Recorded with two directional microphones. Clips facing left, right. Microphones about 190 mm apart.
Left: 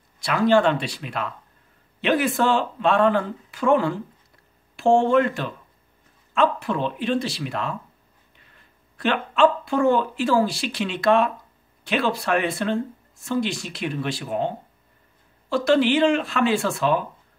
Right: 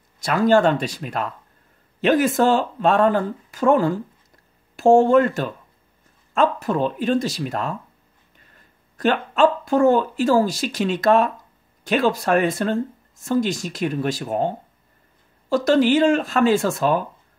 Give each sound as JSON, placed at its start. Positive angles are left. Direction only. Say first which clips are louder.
{"t": 0.2, "sound": "speech", "louder": "right 2 dB", "side_deg": -45}
{"t": 15.5, "sound": "speech", "louder": "right 2 dB", "side_deg": -40}